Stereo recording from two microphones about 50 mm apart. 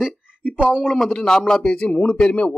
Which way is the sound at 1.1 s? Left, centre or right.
Centre.